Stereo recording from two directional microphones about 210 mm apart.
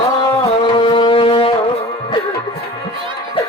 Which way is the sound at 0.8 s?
25° left (ahead or behind).